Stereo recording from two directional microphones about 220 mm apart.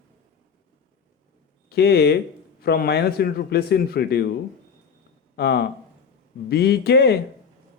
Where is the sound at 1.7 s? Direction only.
50° left (ahead or behind).